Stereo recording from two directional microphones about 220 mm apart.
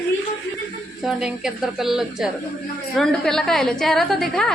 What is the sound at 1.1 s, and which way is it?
A woman's voice, 5° right (ahead or behind).